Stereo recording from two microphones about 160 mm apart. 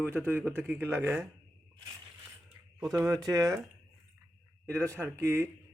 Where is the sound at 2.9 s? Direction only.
20° right (ahead or behind).